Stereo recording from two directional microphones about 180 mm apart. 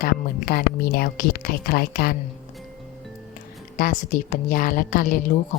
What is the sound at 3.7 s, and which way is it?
A woman's voice, 45° left (ahead or behind).